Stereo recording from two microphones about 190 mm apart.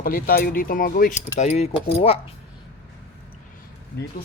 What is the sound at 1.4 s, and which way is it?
Speech, 35° left (ahead or behind).